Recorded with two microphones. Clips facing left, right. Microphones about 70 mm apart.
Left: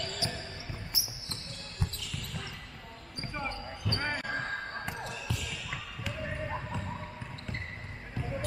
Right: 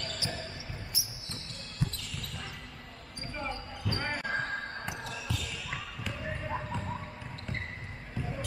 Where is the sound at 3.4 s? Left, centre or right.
Centre.